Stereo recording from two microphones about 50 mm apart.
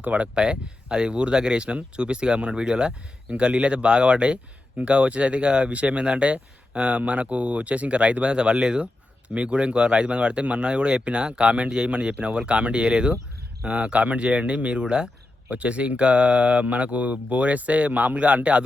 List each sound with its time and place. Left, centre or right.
0.0 s speech: right